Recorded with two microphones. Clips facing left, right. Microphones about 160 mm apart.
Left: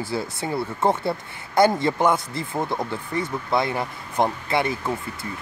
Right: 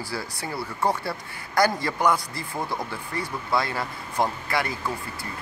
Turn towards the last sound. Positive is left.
turn(degrees=25)  # may be behind; listen again after turning